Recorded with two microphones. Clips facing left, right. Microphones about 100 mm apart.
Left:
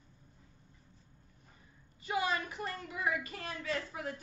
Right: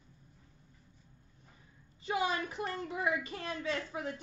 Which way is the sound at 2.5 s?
30° right (ahead or behind).